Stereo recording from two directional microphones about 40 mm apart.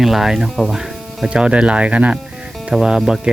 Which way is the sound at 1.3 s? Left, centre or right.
Right.